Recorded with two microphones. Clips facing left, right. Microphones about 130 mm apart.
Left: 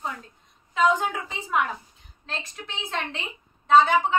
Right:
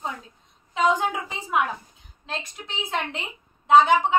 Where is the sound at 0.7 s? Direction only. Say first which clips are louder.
Even; 15° right (ahead or behind).